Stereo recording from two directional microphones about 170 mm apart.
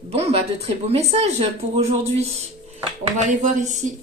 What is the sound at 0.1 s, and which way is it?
Speech, 35° right (ahead or behind).